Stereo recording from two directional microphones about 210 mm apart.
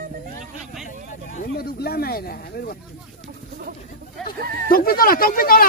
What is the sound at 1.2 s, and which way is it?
Speech, 40° left (ahead or behind).